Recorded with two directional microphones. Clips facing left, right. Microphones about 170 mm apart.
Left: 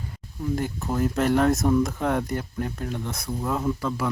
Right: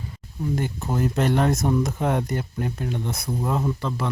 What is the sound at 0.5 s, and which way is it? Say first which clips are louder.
Speech: even; centre (ahead or behind).